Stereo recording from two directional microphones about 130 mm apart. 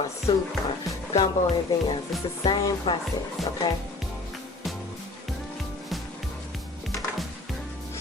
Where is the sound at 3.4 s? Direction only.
Centre (ahead or behind).